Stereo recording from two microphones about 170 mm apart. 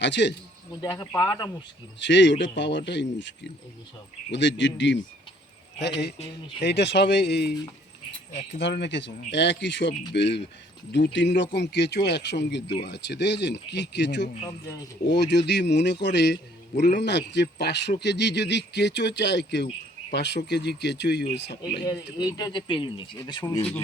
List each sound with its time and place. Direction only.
0.0 s speech: 90° left
0.8 s speech: 20° left (ahead or behind)
2.0 s speech: 90° left
6.6 s speech: 85° left
8.5 s a man's voice: 90° left
21.8 s speech: 20° left (ahead or behind)